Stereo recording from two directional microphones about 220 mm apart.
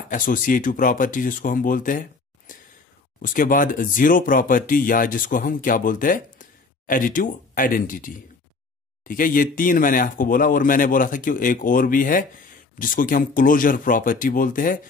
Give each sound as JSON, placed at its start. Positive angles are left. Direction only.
{"t": 0.1, "sound": "speech", "side_deg": 40}